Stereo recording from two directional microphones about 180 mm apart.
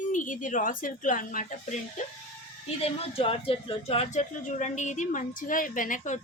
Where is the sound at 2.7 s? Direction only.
30° left (ahead or behind).